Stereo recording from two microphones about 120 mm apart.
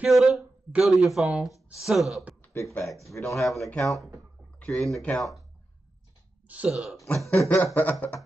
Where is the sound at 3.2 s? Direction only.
15° left (ahead or behind).